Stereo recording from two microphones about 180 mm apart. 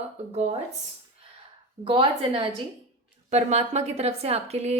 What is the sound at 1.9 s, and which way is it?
Speech, 30° right (ahead or behind).